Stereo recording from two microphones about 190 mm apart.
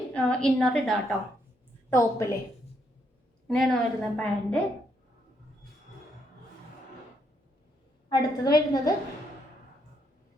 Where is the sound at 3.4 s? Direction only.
Centre (ahead or behind).